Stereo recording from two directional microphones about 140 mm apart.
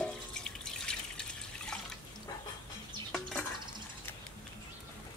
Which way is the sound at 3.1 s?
5° left (ahead or behind).